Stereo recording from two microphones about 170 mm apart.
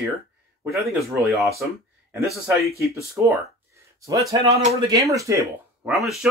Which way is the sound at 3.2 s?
10° right (ahead or behind).